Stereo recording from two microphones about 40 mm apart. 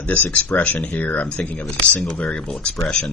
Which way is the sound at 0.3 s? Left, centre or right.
Left.